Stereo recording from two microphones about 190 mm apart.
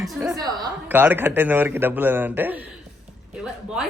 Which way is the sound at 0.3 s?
20° right (ahead or behind).